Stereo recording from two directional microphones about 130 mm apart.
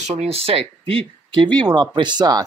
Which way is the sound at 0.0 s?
55° right (ahead or behind).